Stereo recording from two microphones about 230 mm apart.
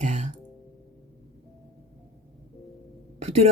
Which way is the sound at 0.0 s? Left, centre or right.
Right.